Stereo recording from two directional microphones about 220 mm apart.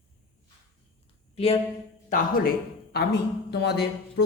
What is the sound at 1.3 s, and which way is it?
Speech, 25° left (ahead or behind).